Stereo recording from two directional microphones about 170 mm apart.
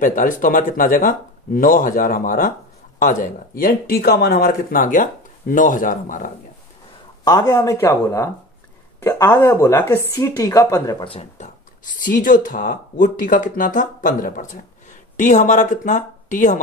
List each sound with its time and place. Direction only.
0.0 s speech: 50° left (ahead or behind)
7.2 s speech: 20° left (ahead or behind)
11.1 s speech: 45° left (ahead or behind)